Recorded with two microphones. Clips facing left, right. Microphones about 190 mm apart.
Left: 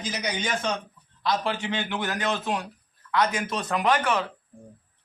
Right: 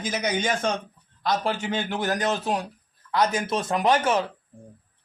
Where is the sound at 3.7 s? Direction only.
25° right (ahead or behind).